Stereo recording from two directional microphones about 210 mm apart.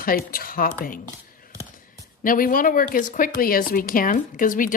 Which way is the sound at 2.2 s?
40° left (ahead or behind).